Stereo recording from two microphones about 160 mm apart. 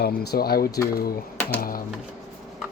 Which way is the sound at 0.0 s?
85° left.